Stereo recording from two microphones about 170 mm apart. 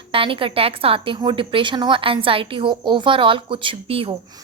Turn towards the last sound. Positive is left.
turn(degrees=-35)  # may be behind; listen again after turning